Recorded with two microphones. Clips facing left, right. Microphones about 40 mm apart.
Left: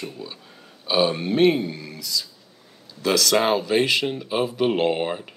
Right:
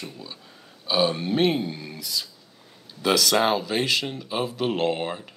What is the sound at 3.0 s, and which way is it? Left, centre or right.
Speech, centre.